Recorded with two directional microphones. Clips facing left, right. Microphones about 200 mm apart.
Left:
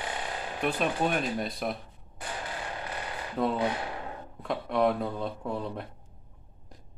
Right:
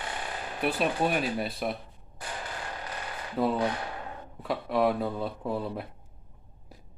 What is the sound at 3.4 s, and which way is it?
Speech, 5° right (ahead or behind).